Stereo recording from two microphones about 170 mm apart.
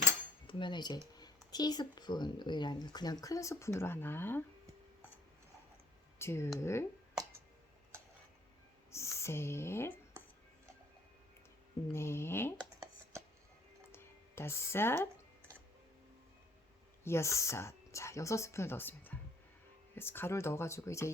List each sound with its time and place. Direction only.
0.4 s cutlery: 25° left (ahead or behind)
1.1 s speech: 25° left (ahead or behind)
6.1 s speech: 15° left (ahead or behind)
8.9 s speech: 15° left (ahead or behind)
11.9 s speech: 15° left (ahead or behind)
13.9 s music: 15° left (ahead or behind)
17.0 s speech: 15° left (ahead or behind)